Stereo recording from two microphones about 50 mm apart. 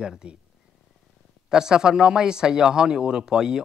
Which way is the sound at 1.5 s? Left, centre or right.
Centre.